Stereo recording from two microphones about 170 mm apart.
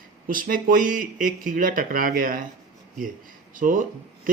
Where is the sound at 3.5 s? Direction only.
50° right (ahead or behind).